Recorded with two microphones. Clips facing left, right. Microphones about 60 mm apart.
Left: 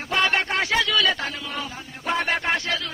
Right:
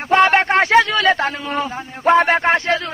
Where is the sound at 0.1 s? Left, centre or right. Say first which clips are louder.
Right 9 dB; right.